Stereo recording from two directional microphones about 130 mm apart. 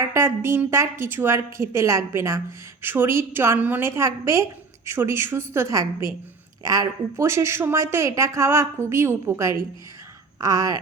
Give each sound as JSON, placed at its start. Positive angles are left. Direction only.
{"t": 0.0, "sound": "a woman's voice", "side_deg": -20}